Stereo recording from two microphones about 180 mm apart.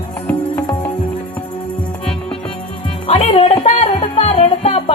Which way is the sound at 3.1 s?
35° left (ahead or behind).